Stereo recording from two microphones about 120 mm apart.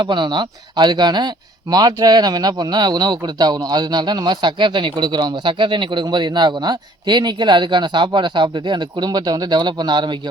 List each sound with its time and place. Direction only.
0.0 s speech: 40° right (ahead or behind)